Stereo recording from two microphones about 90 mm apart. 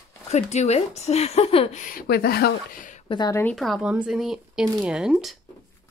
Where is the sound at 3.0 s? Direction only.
55° left (ahead or behind).